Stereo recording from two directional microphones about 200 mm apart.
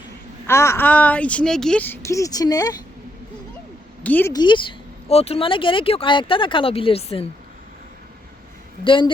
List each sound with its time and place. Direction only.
0.4 s speech: 15° left (ahead or behind)
4.0 s speech: 10° left (ahead or behind)
4.4 s speech: 25° left (ahead or behind)
8.8 s speech: 25° left (ahead or behind)